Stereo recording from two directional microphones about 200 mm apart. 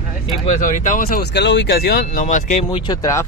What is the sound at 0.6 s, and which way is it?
Speech, 40° left (ahead or behind).